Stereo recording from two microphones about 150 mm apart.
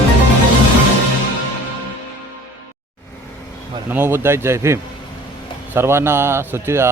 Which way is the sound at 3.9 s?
15° right (ahead or behind).